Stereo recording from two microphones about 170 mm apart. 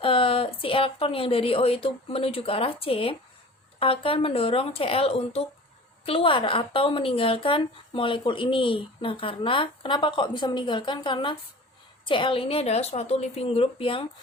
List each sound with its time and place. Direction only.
0.0 s a woman's voice: 30° left (ahead or behind)